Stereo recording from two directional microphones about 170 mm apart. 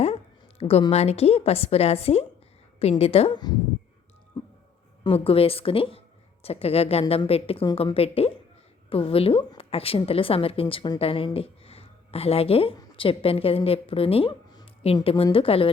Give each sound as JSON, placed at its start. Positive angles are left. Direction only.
{"t": 0.6, "sound": "a woman's voice", "side_deg": 35}
{"t": 5.0, "sound": "a woman's voice", "side_deg": 35}